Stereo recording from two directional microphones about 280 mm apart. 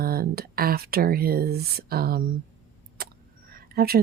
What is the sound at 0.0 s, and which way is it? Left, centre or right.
Speech, right.